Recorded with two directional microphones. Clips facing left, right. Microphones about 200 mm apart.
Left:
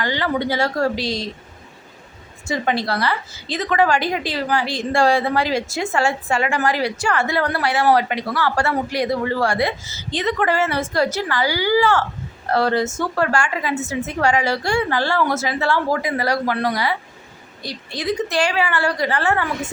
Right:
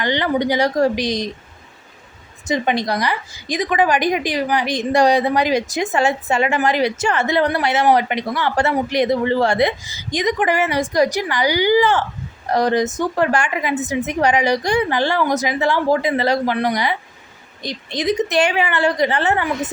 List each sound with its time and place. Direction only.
0.0 s a woman's voice: 20° right (ahead or behind)
2.5 s a woman's voice: 20° right (ahead or behind)